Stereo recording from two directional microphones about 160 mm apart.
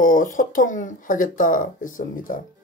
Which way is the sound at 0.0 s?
60° left (ahead or behind).